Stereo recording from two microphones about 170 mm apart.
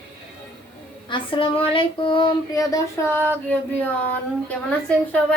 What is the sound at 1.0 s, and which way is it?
Child singing, 30° left (ahead or behind).